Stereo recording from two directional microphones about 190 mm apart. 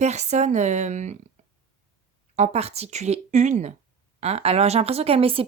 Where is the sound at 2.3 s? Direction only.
35° right (ahead or behind).